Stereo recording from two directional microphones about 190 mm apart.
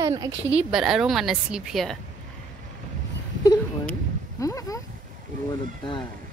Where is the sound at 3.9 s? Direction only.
15° left (ahead or behind).